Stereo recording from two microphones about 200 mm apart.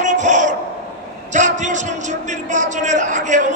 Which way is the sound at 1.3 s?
40° right (ahead or behind).